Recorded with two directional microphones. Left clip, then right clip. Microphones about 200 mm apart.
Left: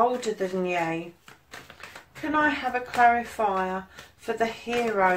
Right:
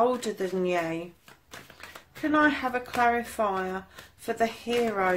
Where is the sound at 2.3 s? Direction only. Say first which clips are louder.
Even; 50° right (ahead or behind).